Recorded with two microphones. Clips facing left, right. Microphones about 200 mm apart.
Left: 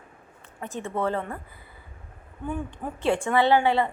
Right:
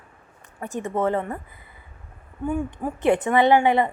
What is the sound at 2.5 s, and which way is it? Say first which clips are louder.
A woman's voice: right 5 dB; 15° right (ahead or behind).